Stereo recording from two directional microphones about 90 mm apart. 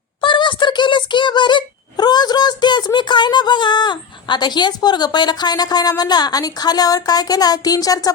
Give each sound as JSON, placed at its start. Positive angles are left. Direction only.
{"t": 0.2, "sound": "speech", "side_deg": 60}